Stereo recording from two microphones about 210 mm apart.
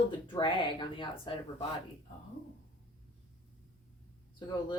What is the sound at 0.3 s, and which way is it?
Speech, 25° left (ahead or behind).